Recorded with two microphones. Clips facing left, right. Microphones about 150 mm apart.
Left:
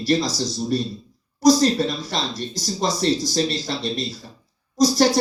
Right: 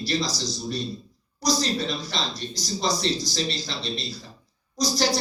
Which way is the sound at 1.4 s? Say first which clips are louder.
Left 9 dB; 50° left (ahead or behind).